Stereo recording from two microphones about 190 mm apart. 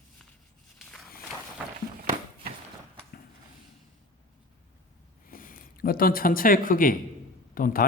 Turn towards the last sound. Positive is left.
turn(degrees=45)  # may be behind; listen again after turning